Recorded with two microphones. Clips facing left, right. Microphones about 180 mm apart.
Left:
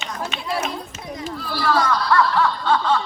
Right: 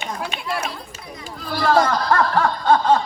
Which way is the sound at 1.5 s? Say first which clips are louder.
Right 3 dB; 45° right (ahead or behind).